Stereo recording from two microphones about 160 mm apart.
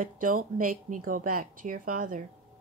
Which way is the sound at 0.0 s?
60° right (ahead or behind).